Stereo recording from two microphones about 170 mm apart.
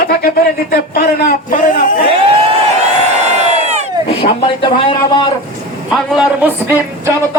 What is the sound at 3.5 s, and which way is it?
Crowd, 40° right (ahead or behind).